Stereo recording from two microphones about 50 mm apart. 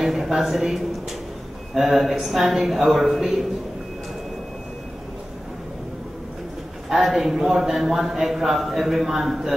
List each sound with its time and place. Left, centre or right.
0.0 s a man's voice: centre
6.9 s a man's voice: centre